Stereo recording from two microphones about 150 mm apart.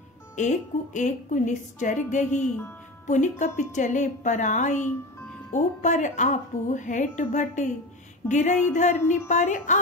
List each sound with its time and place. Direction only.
0.4 s a woman's voice: 55° left (ahead or behind)